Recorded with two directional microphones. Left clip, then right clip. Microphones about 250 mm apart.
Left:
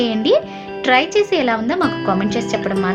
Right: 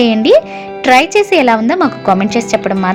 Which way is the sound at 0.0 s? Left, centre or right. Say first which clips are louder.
Right 7 dB; right.